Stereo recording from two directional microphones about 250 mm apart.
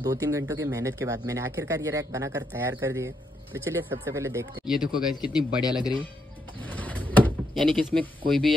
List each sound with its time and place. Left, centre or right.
0.0 s speech: centre
5.6 s speech: centre
6.8 s door: centre
8.3 s speech: centre